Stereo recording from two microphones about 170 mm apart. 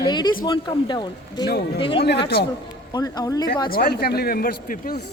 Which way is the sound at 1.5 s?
70° left (ahead or behind).